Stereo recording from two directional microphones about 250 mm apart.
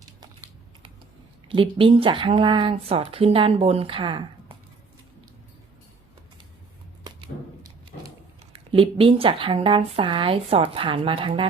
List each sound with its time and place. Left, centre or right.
1.5 s speech: right
8.5 s speech: right